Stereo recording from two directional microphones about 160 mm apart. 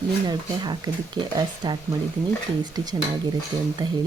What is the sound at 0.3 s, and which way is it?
Speech, 30° right (ahead or behind).